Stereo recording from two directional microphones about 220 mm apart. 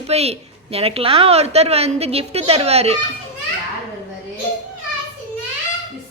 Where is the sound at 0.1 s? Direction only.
30° right (ahead or behind).